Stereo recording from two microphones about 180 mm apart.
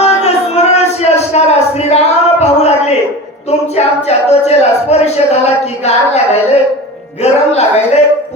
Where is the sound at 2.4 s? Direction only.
35° left (ahead or behind).